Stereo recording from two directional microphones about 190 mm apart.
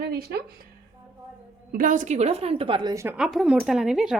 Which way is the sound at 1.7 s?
45° right (ahead or behind).